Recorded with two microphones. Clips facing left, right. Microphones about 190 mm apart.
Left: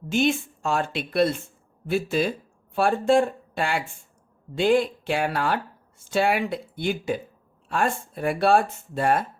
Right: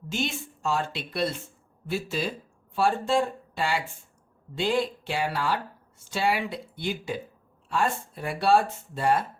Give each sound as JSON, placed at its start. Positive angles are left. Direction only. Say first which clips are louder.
{"t": 0.1, "sound": "speech", "louder": "left 9 dB", "side_deg": 55}